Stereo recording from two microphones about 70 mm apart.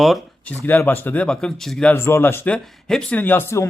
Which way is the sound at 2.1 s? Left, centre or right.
Left.